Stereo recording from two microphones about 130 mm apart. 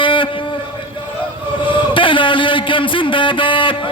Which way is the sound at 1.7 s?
40° left (ahead or behind).